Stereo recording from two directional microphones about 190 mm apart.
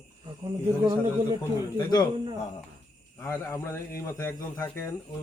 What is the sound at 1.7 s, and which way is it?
Speech, 20° left (ahead or behind).